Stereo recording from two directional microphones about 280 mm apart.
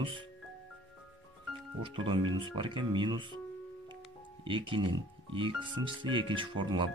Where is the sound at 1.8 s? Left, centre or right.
Centre.